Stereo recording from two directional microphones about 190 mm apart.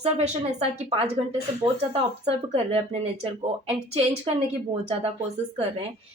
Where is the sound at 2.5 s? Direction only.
30° right (ahead or behind).